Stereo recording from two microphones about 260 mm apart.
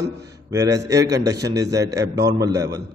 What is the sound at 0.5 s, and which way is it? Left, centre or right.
A man's voice, centre.